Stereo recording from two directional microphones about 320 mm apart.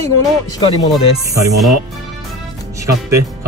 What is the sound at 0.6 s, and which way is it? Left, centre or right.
Speech, centre.